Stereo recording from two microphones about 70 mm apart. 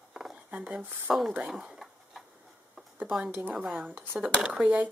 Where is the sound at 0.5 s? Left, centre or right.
Centre.